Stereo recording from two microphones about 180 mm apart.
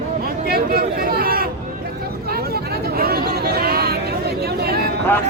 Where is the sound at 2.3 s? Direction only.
60° right (ahead or behind).